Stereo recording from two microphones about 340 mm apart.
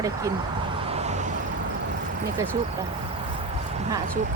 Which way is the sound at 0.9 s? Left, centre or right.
Centre.